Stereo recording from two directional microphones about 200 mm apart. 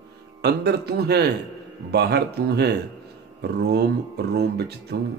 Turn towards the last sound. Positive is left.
turn(degrees=-55)  # may be behind; listen again after turning